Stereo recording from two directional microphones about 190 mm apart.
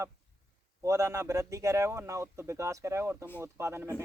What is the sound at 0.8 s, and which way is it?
A man's voice, 15° right (ahead or behind).